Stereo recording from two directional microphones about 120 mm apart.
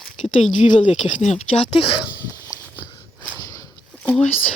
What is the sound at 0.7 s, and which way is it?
Speech, 85° left.